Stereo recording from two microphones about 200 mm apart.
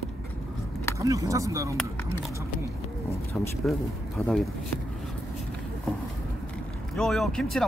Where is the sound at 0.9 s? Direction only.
15° right (ahead or behind).